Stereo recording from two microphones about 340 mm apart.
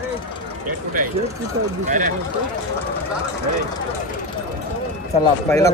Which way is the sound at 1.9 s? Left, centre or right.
Right.